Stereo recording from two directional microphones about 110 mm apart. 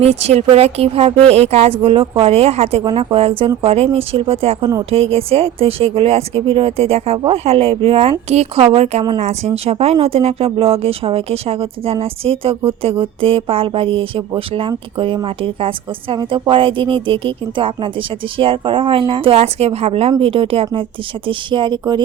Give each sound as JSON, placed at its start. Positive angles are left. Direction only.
{"t": 0.0, "sound": "speech", "side_deg": -75}
{"t": 1.8, "sound": "speech", "side_deg": -60}
{"t": 8.3, "sound": "a woman's voice", "side_deg": -75}
{"t": 21.2, "sound": "a woman's voice", "side_deg": -45}